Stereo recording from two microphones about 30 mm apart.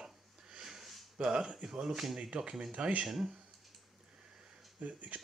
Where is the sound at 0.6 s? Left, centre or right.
Centre.